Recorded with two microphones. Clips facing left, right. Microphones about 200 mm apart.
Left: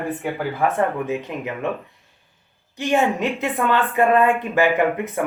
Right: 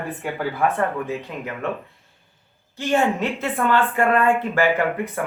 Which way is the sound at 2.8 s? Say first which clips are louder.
Left 1 dB; 15° left (ahead or behind).